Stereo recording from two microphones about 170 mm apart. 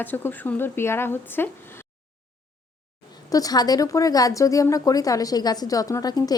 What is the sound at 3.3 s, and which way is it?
A woman's voice, 20° left (ahead or behind).